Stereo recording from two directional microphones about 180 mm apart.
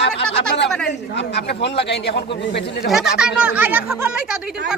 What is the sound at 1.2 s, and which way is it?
A man's voice, 75° left (ahead or behind).